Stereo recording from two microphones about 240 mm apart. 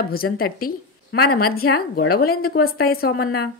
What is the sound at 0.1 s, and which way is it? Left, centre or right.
A woman's voice, left.